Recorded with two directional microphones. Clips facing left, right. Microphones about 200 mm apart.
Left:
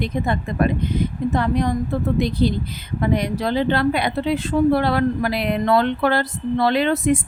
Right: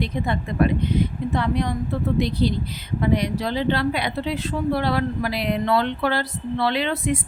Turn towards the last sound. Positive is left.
turn(degrees=45)  # may be behind; listen again after turning